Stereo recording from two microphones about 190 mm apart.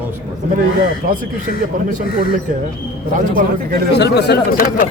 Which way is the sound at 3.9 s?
60° left (ahead or behind).